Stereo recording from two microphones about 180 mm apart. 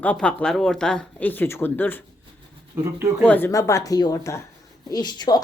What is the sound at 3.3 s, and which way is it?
Speech, 10° left (ahead or behind).